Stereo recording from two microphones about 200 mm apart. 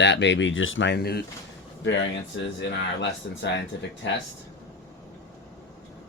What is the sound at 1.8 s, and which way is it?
Speech, 65° left (ahead or behind).